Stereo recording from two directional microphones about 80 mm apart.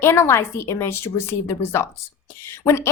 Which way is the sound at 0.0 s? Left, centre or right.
Left.